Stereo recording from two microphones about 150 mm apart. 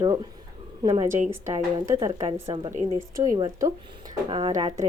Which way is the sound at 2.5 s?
35° right (ahead or behind).